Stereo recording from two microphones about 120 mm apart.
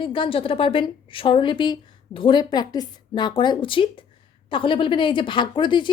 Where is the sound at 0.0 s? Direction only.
45° left (ahead or behind).